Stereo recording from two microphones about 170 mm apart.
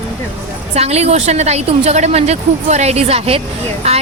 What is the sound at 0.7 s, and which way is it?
Speech, 40° right (ahead or behind).